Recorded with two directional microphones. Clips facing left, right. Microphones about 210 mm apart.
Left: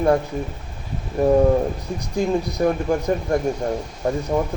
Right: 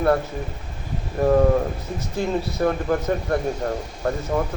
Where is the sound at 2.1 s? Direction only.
15° left (ahead or behind).